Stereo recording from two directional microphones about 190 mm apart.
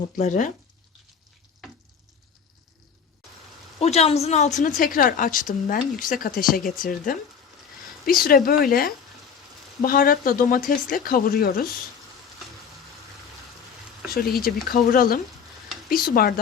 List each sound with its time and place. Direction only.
0.2 s speech: 40° left (ahead or behind)
3.8 s a woman's voice: 35° left (ahead or behind); by 11.8 s 50° left (ahead or behind)
14.1 s a woman's voice: 50° left (ahead or behind)